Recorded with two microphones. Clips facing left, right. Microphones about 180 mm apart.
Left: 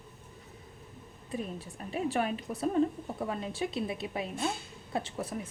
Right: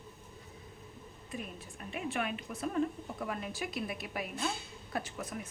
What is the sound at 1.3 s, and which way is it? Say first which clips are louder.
A woman's voice: left 6 dB; 35° left (ahead or behind).